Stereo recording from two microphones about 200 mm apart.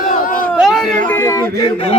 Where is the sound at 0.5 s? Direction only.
Centre (ahead or behind); by 1.7 s 15° left (ahead or behind).